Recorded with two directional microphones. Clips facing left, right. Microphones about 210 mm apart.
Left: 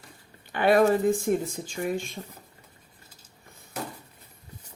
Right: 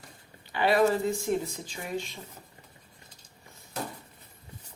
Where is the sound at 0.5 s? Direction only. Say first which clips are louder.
Left 3 dB; 50° left (ahead or behind).